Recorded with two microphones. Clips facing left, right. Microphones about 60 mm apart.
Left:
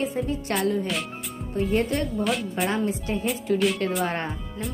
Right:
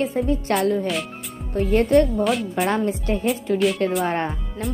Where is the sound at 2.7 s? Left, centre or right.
Right.